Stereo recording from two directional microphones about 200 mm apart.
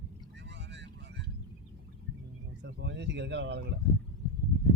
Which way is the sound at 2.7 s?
60° right (ahead or behind).